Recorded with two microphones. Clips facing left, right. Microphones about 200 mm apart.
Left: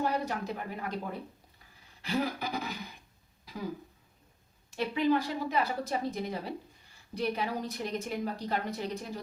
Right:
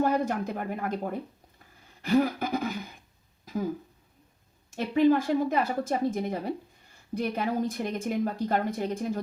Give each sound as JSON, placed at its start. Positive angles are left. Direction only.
{"t": 0.0, "sound": "speech", "side_deg": -50}
{"t": 2.0, "sound": "a woman's voice", "side_deg": -50}
{"t": 3.4, "sound": "throat clearing", "side_deg": -45}
{"t": 4.7, "sound": "a woman's voice", "side_deg": -50}